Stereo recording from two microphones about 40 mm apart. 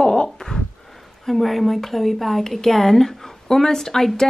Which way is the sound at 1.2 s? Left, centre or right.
Centre.